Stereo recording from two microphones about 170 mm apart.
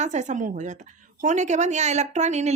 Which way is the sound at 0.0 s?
45° right (ahead or behind).